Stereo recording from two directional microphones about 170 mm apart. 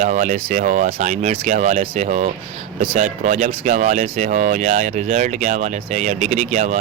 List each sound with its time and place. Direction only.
0.0 s speech: 45° right (ahead or behind)